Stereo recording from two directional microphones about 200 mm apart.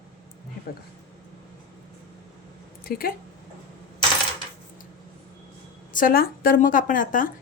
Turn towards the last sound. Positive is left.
turn(degrees=40)  # may be behind; listen again after turning